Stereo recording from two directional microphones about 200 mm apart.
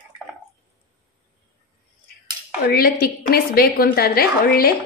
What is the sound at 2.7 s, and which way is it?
A woman's voice, 50° left (ahead or behind).